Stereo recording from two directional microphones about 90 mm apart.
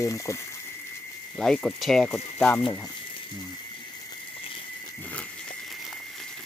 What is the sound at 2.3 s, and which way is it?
Speech, 20° left (ahead or behind).